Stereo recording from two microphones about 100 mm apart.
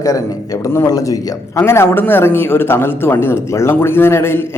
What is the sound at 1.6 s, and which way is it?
Speech, 25° left (ahead or behind).